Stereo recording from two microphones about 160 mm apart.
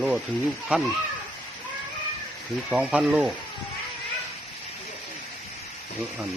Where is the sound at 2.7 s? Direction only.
5° right (ahead or behind).